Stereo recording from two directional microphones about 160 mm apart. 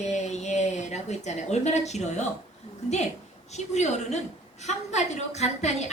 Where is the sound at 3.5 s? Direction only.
45° left (ahead or behind).